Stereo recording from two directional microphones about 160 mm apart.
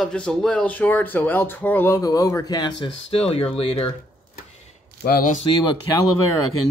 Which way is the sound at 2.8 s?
35° left (ahead or behind).